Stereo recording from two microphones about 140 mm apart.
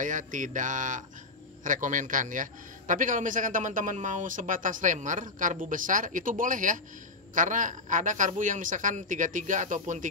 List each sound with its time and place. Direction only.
0.0 s a man's voice: 65° right (ahead or behind)